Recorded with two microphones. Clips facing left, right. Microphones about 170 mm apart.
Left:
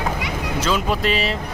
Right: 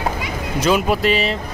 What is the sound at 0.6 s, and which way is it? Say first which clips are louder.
Speech: right 5 dB; 10° right (ahead or behind).